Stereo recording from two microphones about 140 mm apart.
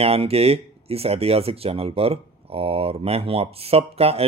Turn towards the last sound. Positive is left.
turn(degrees=-45)  # may be behind; listen again after turning